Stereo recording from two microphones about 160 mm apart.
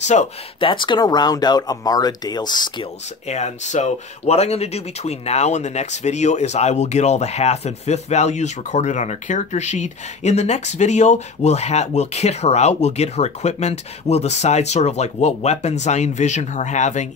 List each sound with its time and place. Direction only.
0.0 s speech: 45° left (ahead or behind)
0.6 s speech: 30° left (ahead or behind)
3.3 s speech: 45° left (ahead or behind)